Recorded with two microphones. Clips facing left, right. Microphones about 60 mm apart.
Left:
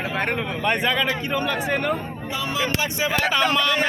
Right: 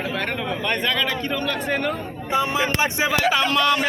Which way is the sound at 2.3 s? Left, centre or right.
Right.